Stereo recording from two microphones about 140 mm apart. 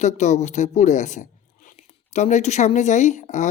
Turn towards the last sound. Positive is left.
turn(degrees=60)  # may be behind; listen again after turning